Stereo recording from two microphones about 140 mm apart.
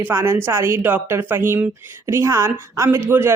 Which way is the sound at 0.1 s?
15° right (ahead or behind).